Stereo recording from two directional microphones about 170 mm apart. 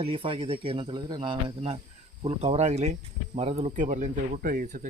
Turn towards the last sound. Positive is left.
turn(degrees=-55)  # may be behind; listen again after turning